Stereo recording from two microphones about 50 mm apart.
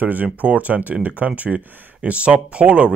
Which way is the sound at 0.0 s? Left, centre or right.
Right.